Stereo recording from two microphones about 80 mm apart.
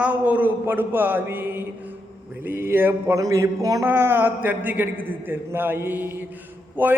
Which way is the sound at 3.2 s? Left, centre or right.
Right.